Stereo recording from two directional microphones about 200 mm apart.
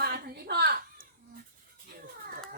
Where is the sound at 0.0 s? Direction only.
50° right (ahead or behind).